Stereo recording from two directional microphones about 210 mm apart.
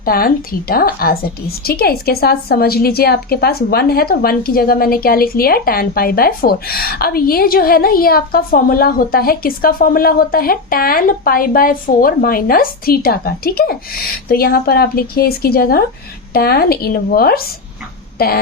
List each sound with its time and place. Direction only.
0.0 s a woman's voice: 45° left (ahead or behind)